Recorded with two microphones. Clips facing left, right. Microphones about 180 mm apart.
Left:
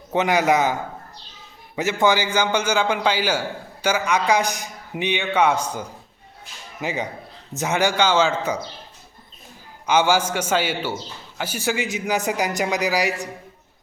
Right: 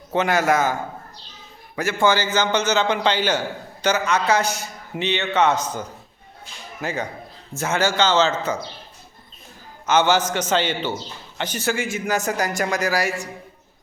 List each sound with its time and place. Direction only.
0.1 s a man's voice: 15° left (ahead or behind)
9.8 s a man's voice: 10° left (ahead or behind)